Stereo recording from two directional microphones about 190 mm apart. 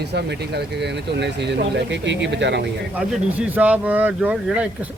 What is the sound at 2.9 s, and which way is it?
Speech, 10° right (ahead or behind).